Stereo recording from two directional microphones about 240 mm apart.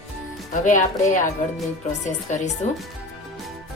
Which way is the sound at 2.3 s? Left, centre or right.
Left.